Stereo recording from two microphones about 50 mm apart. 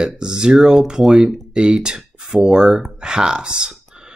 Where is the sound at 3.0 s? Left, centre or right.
Centre.